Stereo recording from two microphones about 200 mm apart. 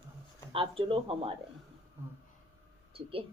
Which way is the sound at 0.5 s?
25° right (ahead or behind).